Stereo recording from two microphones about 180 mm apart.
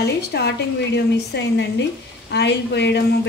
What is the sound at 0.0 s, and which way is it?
Speech, 65° left (ahead or behind).